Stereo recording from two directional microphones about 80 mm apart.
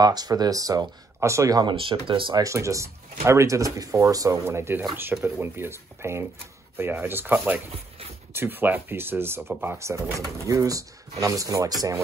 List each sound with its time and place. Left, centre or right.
0.0 s speech: right
1.7 s speech: right
2.4 s speech: right
4.5 s speech: right
9.8 s speech: right